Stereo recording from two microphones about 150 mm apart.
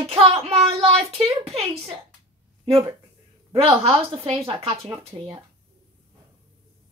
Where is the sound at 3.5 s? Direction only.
40° right (ahead or behind).